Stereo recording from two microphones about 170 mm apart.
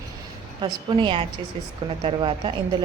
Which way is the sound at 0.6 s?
30° right (ahead or behind).